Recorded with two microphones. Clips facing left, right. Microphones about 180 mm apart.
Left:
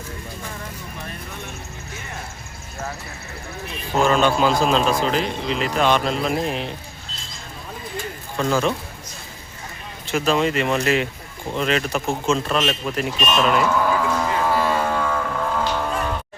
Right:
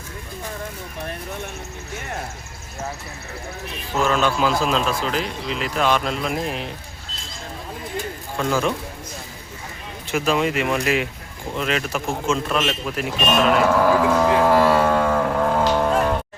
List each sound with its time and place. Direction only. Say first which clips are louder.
4.0 s speech: left 2 dB; 5° right (ahead or behind)
8.4 s speech: left 1 dB; 5° right (ahead or behind)
10.1 s speech: left 1 dB; 10° right (ahead or behind)
13.1 s a man's voice: right 2 dB; 55° right (ahead or behind)
14.7 s music: right 4 dB; 45° right (ahead or behind)